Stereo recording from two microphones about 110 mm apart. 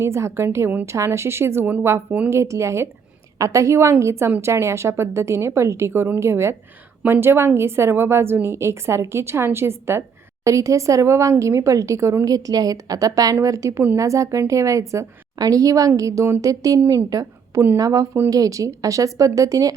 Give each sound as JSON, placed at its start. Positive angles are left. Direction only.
{"t": 0.0, "sound": "a woman's voice", "side_deg": -25}